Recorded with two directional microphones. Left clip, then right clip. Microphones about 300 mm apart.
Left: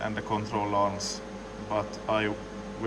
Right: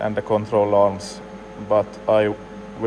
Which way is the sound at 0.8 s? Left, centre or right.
Left.